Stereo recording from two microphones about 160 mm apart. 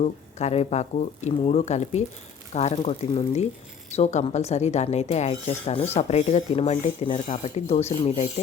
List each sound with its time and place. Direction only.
0.0 s speech: 45° left (ahead or behind)